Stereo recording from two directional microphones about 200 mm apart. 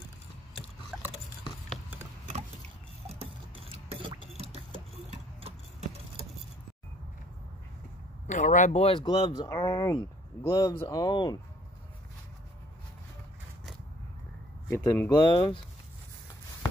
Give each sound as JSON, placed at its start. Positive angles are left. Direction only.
{"t": 3.7, "sound": "a sound", "side_deg": -25}
{"t": 8.3, "sound": "speech", "side_deg": 40}
{"t": 14.7, "sound": "speech", "side_deg": 15}